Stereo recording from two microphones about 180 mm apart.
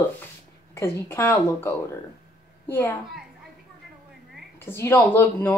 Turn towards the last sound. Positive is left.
turn(degrees=10)  # may be behind; listen again after turning